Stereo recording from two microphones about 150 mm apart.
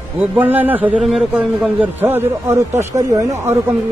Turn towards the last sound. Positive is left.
turn(degrees=-20)  # may be behind; listen again after turning